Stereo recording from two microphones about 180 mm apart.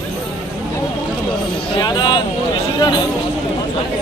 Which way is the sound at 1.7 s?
25° left (ahead or behind).